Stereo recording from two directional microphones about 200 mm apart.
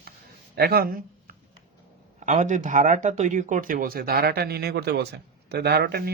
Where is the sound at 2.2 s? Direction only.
35° right (ahead or behind).